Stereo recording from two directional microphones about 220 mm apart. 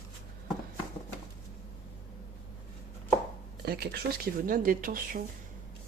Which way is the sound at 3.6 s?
45° right (ahead or behind).